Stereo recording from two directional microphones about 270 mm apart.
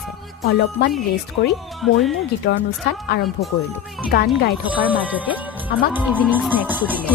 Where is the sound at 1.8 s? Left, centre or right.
Centre.